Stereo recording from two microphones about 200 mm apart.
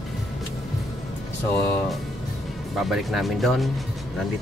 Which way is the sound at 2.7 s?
Centre (ahead or behind).